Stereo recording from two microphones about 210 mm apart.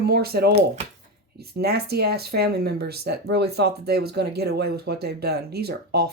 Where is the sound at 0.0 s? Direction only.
50° right (ahead or behind).